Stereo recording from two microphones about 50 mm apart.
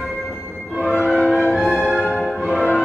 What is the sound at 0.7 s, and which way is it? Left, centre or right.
Train, right.